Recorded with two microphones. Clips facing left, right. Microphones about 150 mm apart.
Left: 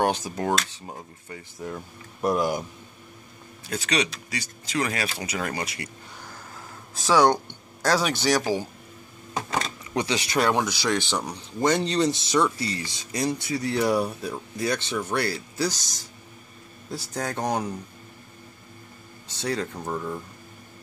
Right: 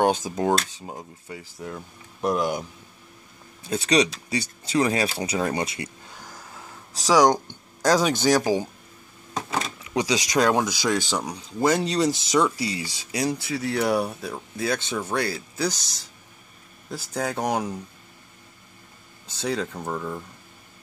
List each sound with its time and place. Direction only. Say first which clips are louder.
0.0 s speech: right 3 dB; 15° right (ahead or behind)
2.2 s speech: even; centre (ahead or behind)
3.6 s speech: right 5 dB; 25° right (ahead or behind)
15.3 s speech: even; centre (ahead or behind)
16.9 s speech: right 2 dB; 5° right (ahead or behind)
19.4 s speech: right 1 dB; 5° right (ahead or behind)